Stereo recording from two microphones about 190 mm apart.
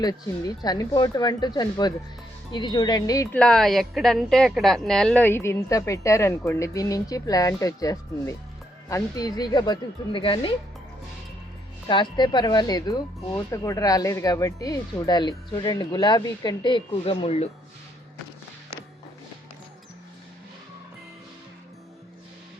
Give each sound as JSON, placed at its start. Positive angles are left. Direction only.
{"t": 0.0, "sound": "speech", "side_deg": 20}
{"t": 3.3, "sound": "speech", "side_deg": 5}
{"t": 11.9, "sound": "speech", "side_deg": 25}